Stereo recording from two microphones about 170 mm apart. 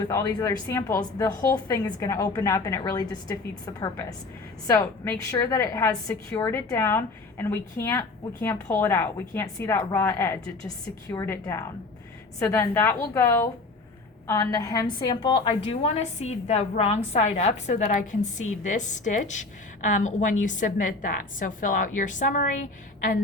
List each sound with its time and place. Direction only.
0.0 s a woman's voice: 20° left (ahead or behind); by 22.4 s 50° left (ahead or behind)